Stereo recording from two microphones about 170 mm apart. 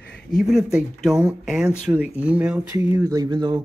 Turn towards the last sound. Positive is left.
turn(degrees=-25)  # may be behind; listen again after turning